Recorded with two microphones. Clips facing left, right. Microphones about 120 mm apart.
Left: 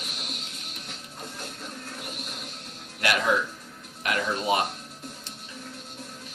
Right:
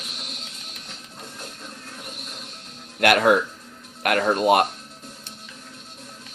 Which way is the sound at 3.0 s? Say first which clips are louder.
Right 7 dB; 55° right (ahead or behind).